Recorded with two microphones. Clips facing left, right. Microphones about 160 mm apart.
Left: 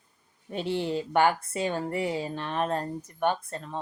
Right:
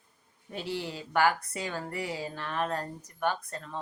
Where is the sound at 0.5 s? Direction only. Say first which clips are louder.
Left 7 dB; 20° left (ahead or behind).